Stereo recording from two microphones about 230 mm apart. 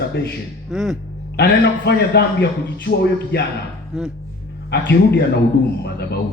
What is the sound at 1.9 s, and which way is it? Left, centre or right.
A man's voice, left.